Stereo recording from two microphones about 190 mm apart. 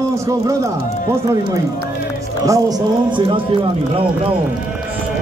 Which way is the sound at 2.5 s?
20° right (ahead or behind).